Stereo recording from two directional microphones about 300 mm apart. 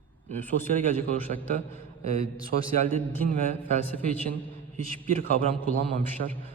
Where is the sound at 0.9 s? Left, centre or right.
Right.